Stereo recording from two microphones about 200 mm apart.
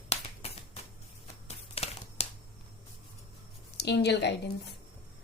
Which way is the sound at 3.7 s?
55° left (ahead or behind).